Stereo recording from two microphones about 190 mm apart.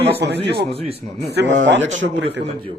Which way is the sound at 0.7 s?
30° right (ahead or behind).